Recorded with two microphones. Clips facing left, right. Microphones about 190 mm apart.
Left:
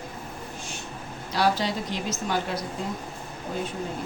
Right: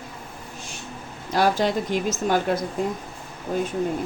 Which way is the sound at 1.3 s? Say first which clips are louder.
Right 4 dB; 50° right (ahead or behind).